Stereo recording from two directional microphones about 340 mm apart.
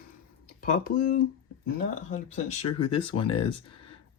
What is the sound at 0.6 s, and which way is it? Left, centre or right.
Speech, left.